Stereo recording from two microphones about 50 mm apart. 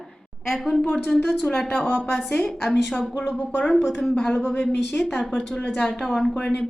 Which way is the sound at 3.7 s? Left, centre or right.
Centre.